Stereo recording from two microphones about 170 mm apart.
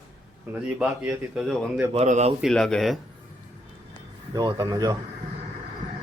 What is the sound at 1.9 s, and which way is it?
Speech, 40° right (ahead or behind).